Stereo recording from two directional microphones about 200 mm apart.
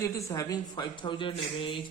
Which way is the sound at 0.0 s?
15° left (ahead or behind).